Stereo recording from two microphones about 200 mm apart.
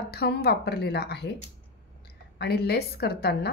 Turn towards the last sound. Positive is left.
turn(degrees=55)  # may be behind; listen again after turning